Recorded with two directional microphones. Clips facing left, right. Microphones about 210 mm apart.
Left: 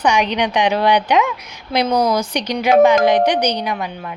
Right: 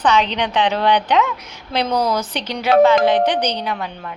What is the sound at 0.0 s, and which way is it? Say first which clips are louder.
A woman's voice: left 1 dB; 15° left (ahead or behind).